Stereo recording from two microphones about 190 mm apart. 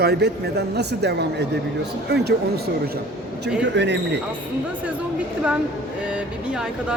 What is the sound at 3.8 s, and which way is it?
Speech, 65° right (ahead or behind).